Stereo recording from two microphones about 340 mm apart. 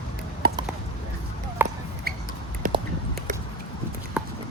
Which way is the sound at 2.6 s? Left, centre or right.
Right.